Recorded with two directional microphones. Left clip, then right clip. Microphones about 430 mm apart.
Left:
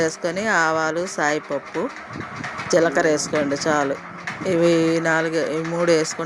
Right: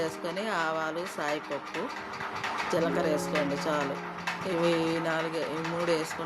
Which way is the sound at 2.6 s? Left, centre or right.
Right.